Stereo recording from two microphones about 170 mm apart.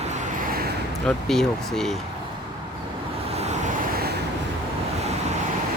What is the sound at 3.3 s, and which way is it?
Vehicle, 40° right (ahead or behind).